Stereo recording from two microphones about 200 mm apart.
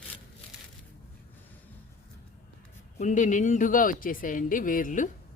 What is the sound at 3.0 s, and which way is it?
Speech, 40° left (ahead or behind).